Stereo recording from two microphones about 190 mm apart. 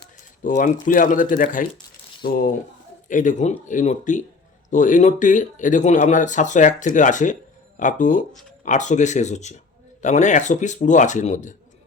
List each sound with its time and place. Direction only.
0.4 s speech: 45° left (ahead or behind)